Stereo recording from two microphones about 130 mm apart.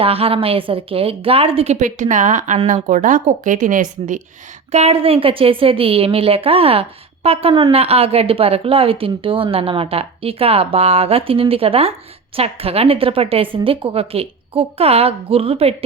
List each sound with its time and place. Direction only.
0.0 s a woman's voice: 45° right (ahead or behind); by 4.2 s 85° right
4.7 s a woman's voice: 55° right (ahead or behind)